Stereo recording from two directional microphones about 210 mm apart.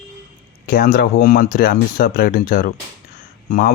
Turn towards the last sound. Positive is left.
turn(degrees=40)  # may be behind; listen again after turning